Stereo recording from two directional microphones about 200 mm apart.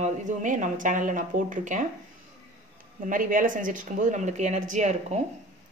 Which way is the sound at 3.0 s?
40° right (ahead or behind).